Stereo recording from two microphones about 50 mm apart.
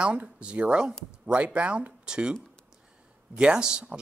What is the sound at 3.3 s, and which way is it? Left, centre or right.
Speech, centre.